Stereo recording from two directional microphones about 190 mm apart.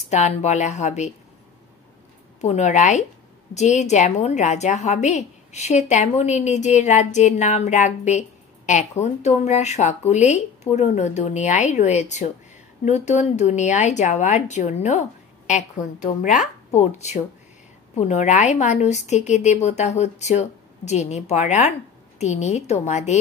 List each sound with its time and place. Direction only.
0.1 s a woman's voice: 35° left (ahead or behind)
2.4 s a woman's voice: 35° left (ahead or behind)